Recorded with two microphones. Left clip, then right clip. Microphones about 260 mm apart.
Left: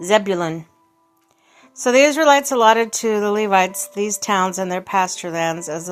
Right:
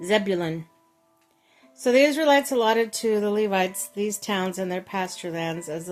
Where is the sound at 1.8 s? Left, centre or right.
Centre.